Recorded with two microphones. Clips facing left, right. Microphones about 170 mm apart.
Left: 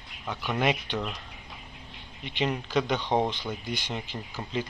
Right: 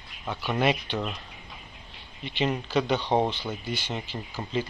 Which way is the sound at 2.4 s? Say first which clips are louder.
Right 1 dB; 5° right (ahead or behind).